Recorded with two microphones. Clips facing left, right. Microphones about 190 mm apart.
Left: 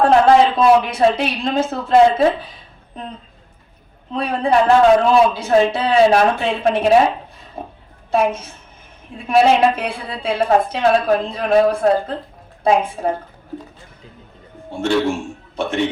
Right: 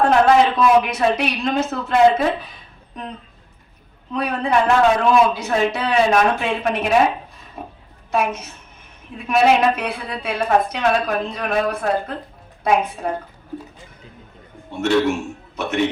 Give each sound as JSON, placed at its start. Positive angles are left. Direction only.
{"t": 0.1, "sound": "a woman's voice", "side_deg": 30}
{"t": 4.1, "sound": "a woman's voice", "side_deg": 30}
{"t": 7.6, "sound": "a sound", "side_deg": 30}
{"t": 8.1, "sound": "a woman's voice", "side_deg": 30}
{"t": 14.7, "sound": "a sound", "side_deg": 30}
{"t": 15.0, "sound": "a man's voice", "side_deg": 30}